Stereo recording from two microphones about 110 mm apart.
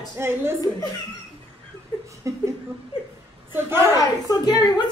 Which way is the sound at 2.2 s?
30° right (ahead or behind).